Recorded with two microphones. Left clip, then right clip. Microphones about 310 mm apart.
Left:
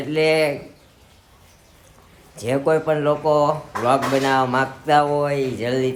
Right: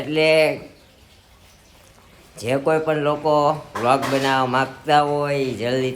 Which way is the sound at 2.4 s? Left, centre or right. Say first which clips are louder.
Even; centre.